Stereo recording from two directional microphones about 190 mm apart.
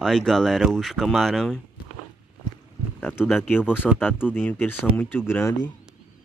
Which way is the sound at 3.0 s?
10° left (ahead or behind).